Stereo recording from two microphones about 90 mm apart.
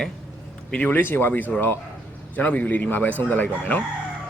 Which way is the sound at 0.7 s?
20° left (ahead or behind).